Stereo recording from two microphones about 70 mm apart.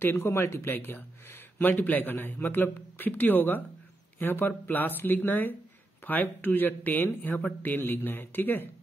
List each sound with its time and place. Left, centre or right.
0.0 s speech: left